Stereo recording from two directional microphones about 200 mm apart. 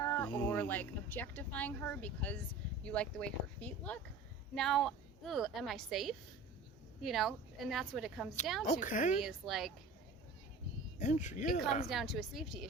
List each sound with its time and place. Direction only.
0.0 s a sound: 10° left (ahead or behind)
0.3 s a woman's voice: 10° left (ahead or behind)
8.6 s speech: 40° left (ahead or behind)
9.2 s a woman's voice: centre (ahead or behind)
11.0 s speech: 35° left (ahead or behind)
11.9 s a woman's voice: centre (ahead or behind)